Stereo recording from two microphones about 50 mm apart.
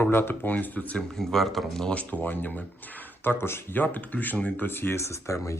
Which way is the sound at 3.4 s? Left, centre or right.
Left.